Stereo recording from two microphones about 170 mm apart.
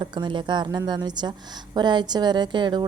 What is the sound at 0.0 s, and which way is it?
A woman's voice, 25° right (ahead or behind).